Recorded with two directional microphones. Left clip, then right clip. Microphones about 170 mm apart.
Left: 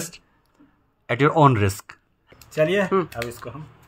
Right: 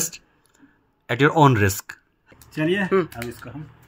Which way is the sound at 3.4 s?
25° left (ahead or behind).